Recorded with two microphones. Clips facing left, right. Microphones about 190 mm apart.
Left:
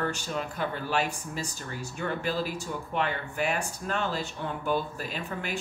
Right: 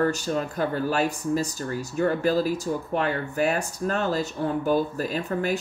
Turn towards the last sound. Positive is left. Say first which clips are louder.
# right 8 dB
turn(degrees=-40)  # may be behind; listen again after turning